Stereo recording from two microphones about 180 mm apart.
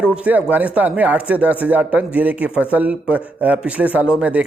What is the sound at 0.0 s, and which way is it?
Speech, 5° right (ahead or behind).